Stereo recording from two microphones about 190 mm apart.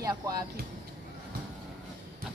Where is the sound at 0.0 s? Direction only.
20° right (ahead or behind).